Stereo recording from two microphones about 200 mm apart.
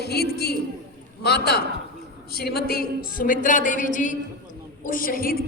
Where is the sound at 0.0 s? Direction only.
55° left (ahead or behind).